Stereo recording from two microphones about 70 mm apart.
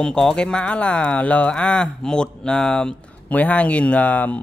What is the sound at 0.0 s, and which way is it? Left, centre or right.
Speech, centre.